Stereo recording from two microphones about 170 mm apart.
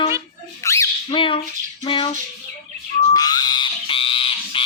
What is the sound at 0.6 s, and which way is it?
Squawk, 15° left (ahead or behind).